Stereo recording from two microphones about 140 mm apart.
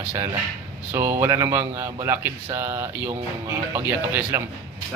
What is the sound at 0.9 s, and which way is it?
Speech, 20° right (ahead or behind).